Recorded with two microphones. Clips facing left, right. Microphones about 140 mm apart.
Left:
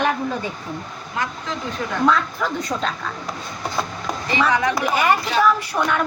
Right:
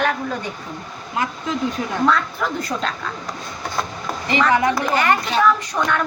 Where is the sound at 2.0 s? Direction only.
Centre (ahead or behind).